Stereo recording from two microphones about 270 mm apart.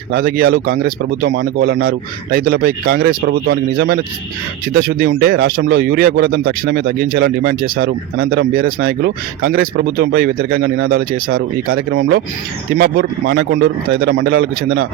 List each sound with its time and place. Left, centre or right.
0.1 s speech: right